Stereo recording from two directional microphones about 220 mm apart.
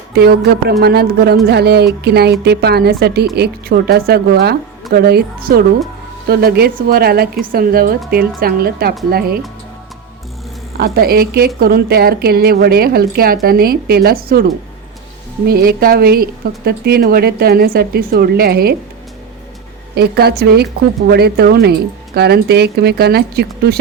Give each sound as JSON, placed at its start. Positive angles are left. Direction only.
{"t": 0.1, "sound": "a woman's voice", "side_deg": -50}
{"t": 10.8, "sound": "a woman's voice", "side_deg": -45}
{"t": 15.4, "sound": "a woman's voice", "side_deg": -45}
{"t": 20.0, "sound": "a woman's voice", "side_deg": -45}